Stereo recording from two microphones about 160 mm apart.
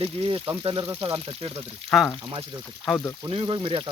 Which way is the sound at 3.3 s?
30° right (ahead or behind).